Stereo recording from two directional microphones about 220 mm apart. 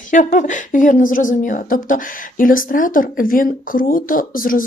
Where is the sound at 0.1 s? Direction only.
35° left (ahead or behind).